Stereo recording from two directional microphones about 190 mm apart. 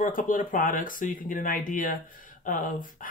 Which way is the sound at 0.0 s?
45° left (ahead or behind).